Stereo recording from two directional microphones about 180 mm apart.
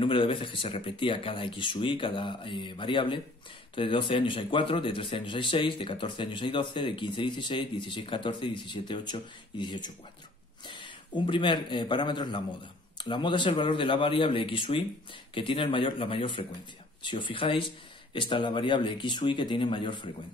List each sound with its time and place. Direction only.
0.0 s a man's voice: 30° left (ahead or behind)